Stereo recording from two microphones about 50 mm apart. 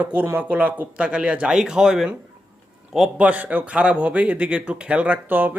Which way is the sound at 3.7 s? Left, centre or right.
Right.